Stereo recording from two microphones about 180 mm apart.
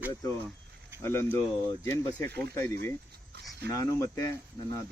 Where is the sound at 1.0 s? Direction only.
15° left (ahead or behind).